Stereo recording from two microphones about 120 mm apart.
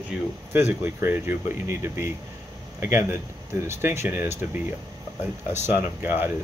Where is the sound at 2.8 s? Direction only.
20° right (ahead or behind).